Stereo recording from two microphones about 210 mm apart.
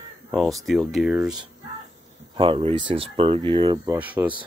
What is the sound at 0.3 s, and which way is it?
Speech, centre (ahead or behind).